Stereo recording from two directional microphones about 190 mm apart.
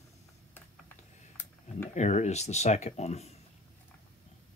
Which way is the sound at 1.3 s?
10° left (ahead or behind).